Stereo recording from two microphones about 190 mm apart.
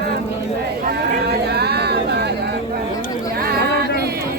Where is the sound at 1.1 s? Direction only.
55° right (ahead or behind).